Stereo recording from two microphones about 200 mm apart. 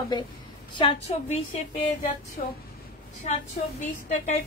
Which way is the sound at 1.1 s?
30° left (ahead or behind).